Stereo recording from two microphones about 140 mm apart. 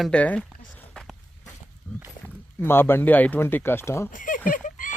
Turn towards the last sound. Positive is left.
turn(degrees=70)  # may be behind; listen again after turning